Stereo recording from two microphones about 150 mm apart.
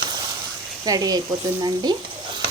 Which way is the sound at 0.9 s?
25° right (ahead or behind).